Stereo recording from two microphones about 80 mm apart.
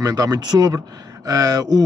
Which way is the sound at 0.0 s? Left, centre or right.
Right.